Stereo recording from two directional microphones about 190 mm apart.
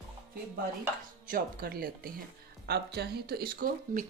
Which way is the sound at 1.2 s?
50° right (ahead or behind).